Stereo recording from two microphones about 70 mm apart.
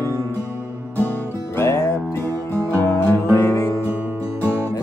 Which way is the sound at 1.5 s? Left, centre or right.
Left.